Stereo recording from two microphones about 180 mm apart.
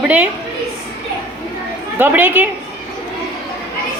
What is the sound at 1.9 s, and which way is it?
Speech, 10° right (ahead or behind).